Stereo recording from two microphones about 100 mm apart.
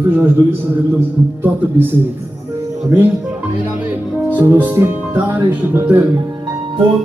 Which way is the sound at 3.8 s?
20° right (ahead or behind).